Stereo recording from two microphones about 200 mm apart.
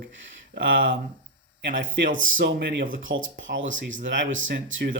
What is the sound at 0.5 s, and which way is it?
Speech, 65° right (ahead or behind).